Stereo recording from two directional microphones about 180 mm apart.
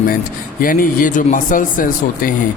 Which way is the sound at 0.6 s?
50° left (ahead or behind).